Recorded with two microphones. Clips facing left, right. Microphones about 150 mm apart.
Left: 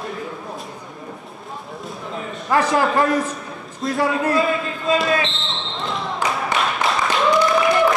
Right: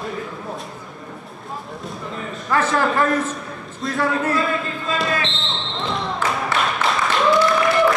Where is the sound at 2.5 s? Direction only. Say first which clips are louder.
Left 2 dB; 15° left (ahead or behind).